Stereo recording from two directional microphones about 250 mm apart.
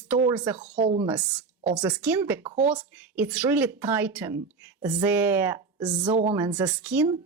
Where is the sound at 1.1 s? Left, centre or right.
Centre.